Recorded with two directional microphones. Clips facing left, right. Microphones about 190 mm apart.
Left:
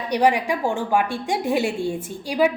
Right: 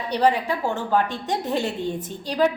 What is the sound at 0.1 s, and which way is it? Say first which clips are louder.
A woman's voice: left 2 dB; 10° left (ahead or behind).